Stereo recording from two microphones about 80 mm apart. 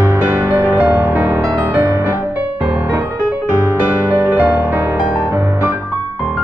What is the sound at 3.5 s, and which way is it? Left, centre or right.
Music, right.